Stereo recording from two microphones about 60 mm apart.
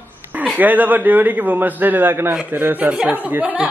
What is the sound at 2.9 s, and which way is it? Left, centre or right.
Speech, centre.